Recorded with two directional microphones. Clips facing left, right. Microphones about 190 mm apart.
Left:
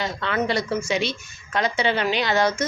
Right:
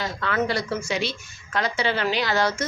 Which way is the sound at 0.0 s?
20° left (ahead or behind).